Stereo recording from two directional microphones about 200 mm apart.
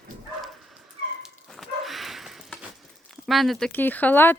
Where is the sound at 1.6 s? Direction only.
Centre (ahead or behind).